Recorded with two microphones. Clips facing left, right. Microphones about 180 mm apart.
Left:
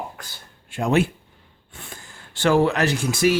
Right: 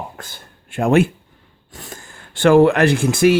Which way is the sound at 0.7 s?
55° right (ahead or behind).